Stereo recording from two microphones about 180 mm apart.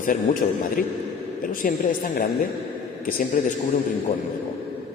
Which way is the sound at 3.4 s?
50° left (ahead or behind).